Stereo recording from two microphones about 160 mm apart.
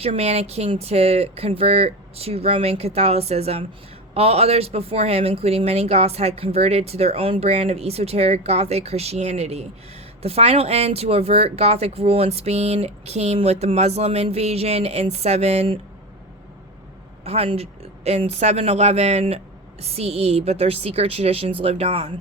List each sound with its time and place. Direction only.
0.0 s speech: 40° right (ahead or behind)
17.2 s speech: 40° right (ahead or behind)